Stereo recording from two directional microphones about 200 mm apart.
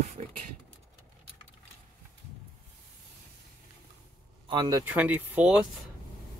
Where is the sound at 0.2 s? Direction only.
35° right (ahead or behind).